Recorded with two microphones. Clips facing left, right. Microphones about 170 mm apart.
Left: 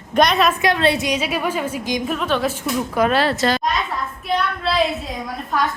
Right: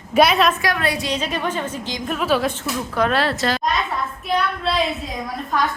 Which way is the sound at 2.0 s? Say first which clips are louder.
Right 3 dB; centre (ahead or behind).